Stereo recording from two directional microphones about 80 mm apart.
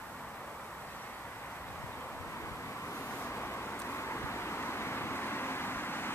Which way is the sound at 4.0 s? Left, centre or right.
Left.